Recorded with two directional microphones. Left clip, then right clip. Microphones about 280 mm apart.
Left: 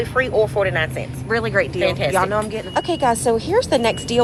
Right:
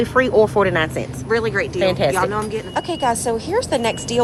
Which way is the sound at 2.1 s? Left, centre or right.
Centre.